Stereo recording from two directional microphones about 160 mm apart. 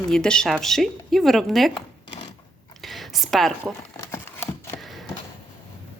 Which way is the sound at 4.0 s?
15° left (ahead or behind).